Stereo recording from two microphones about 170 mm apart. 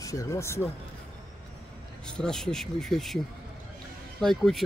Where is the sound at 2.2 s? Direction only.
5° left (ahead or behind).